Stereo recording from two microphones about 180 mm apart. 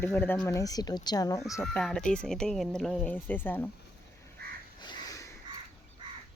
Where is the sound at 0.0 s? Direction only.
10° left (ahead or behind).